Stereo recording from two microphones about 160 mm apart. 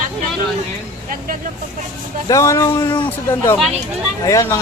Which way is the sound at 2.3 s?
20° left (ahead or behind).